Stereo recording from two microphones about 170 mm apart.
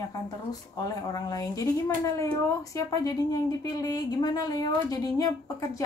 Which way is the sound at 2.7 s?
20° left (ahead or behind).